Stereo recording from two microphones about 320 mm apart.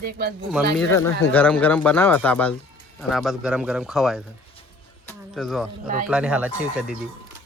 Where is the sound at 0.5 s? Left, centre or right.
Centre.